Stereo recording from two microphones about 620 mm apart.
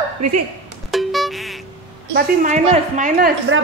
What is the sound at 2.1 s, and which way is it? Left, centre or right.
A woman's voice, centre.